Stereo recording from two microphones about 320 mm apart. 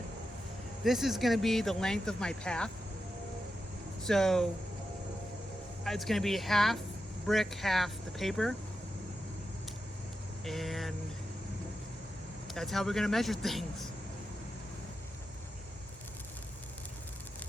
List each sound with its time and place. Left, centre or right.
0.9 s speech: centre
4.0 s speech: centre
5.8 s speech: centre
10.4 s speech: centre
12.5 s speech: centre